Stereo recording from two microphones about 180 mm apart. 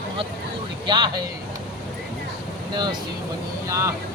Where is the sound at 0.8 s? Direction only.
25° right (ahead or behind).